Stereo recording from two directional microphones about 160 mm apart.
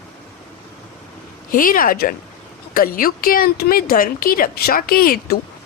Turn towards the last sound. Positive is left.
turn(degrees=70)  # may be behind; listen again after turning